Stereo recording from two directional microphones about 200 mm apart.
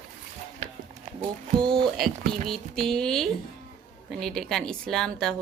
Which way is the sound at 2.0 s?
Centre (ahead or behind).